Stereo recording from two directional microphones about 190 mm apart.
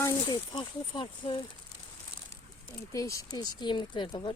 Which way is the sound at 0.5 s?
25° left (ahead or behind).